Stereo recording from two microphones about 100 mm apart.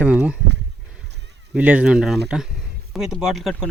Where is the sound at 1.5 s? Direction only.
15° right (ahead or behind).